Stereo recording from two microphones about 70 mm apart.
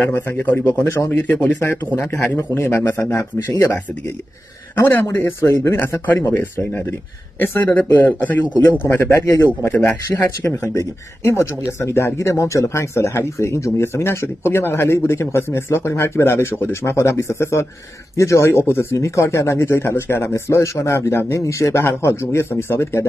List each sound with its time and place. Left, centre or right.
0.1 s a man's voice: left
2.0 s speech: left
6.0 s a man's voice: left
8.8 s speech: left